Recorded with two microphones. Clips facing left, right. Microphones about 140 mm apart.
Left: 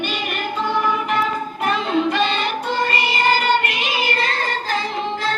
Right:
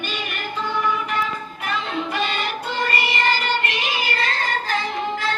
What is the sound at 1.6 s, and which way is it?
Music, 25° left (ahead or behind).